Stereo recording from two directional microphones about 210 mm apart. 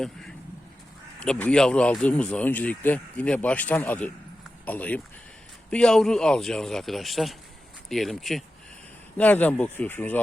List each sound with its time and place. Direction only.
1.2 s speech: 5° left (ahead or behind)